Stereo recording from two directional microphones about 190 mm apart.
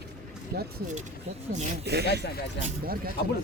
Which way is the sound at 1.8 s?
60° right (ahead or behind).